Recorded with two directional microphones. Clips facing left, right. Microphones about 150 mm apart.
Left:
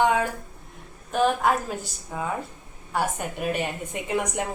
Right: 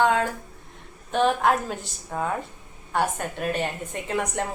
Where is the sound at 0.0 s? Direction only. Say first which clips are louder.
Even; 15° left (ahead or behind).